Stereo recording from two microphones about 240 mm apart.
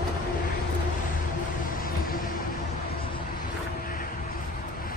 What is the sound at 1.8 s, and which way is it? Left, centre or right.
Vehicle, left.